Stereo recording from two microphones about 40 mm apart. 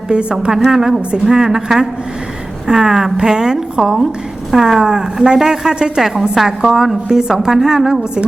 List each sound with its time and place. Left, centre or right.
0.1 s a woman's voice: right
0.7 s a woman's voice: centre